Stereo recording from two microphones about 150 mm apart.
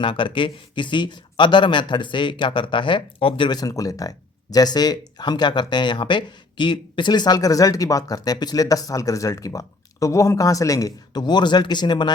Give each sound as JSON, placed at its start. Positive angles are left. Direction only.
{"t": 0.0, "sound": "speech", "side_deg": 35}